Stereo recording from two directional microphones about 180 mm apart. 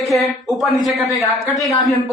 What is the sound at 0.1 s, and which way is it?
A woman's voice, centre (ahead or behind).